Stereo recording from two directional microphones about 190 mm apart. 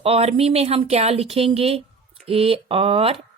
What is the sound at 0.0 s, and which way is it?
Speech, 30° right (ahead or behind).